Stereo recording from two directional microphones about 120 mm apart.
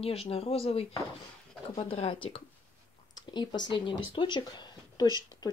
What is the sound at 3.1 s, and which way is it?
Speech, 35° left (ahead or behind).